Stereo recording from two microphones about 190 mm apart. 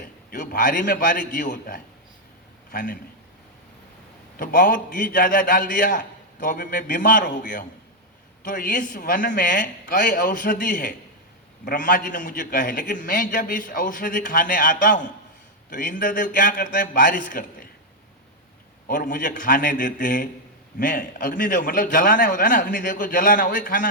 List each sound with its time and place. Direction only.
0.0 s a man's voice: 50° left (ahead or behind)
4.4 s a man's voice: 50° left (ahead or behind)
18.9 s a man's voice: 45° left (ahead or behind)